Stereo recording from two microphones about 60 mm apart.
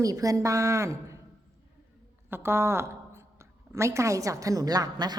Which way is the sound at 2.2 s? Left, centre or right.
Right.